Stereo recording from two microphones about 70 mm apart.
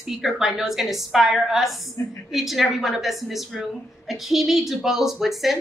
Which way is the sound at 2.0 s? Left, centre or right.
Left.